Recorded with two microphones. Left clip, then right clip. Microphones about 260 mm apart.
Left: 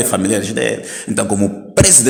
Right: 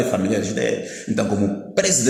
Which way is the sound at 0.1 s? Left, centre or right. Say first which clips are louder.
Left 4 dB; left.